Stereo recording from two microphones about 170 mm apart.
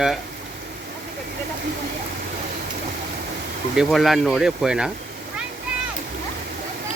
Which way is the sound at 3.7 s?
Centre (ahead or behind).